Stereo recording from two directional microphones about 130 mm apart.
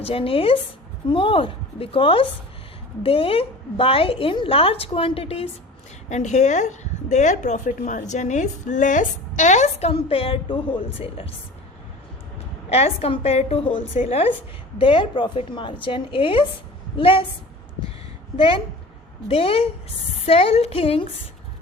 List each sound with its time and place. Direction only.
0.0 s a woman's voice: 45° left (ahead or behind)
6.1 s a woman's voice: 65° left (ahead or behind); by 11.3 s 45° left (ahead or behind)
12.7 s a woman's voice: 50° left (ahead or behind)
19.3 s a woman's voice: 50° left (ahead or behind)